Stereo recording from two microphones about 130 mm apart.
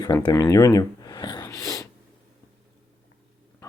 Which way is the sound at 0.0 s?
25° left (ahead or behind).